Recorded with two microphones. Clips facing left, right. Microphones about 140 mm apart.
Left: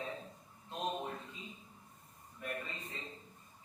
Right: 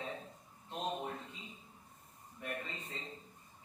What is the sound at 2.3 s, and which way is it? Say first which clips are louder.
Speech: even; 25° right (ahead or behind).